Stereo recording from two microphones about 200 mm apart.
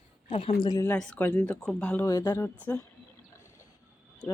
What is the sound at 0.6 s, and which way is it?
Speech, 15° left (ahead or behind).